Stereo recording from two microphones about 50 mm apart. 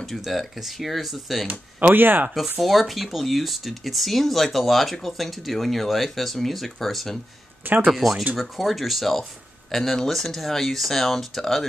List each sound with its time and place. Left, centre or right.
0.0 s speech: centre
1.5 s speech: right
2.6 s speech: centre
7.6 s speech: right
7.9 s speech: centre